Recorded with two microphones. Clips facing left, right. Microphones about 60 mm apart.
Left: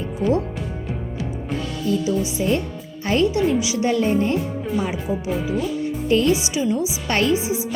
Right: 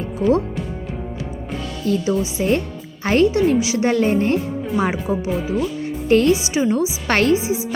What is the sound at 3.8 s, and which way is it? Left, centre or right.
Speech, right.